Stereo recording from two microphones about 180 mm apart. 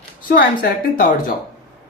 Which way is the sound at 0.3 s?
50° left (ahead or behind).